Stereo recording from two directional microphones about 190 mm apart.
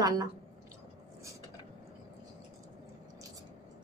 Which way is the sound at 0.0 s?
20° right (ahead or behind).